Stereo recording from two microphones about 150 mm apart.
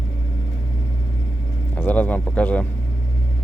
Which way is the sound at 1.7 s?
10° left (ahead or behind).